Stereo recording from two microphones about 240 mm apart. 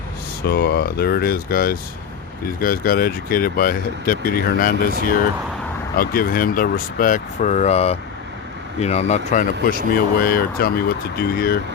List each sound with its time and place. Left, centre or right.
0.4 s speech: left
6.0 s a man's voice: left